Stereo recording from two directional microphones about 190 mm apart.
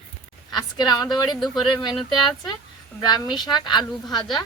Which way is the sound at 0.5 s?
20° left (ahead or behind).